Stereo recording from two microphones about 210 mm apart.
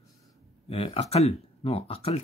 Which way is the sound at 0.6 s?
30° left (ahead or behind).